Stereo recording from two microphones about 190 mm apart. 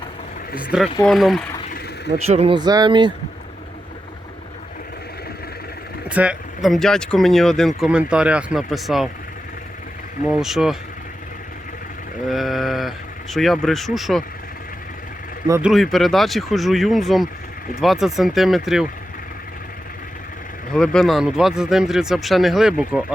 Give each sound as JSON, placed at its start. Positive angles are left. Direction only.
{"t": 0.6, "sound": "speech", "side_deg": -5}
{"t": 2.1, "sound": "speech", "side_deg": -35}
{"t": 6.1, "sound": "speech", "side_deg": -5}
{"t": 10.2, "sound": "speech", "side_deg": -5}
{"t": 12.3, "sound": "a sound", "side_deg": 0}
{"t": 13.3, "sound": "speech", "side_deg": 0}
{"t": 15.6, "sound": "speech", "side_deg": 0}
{"t": 20.7, "sound": "speech", "side_deg": 5}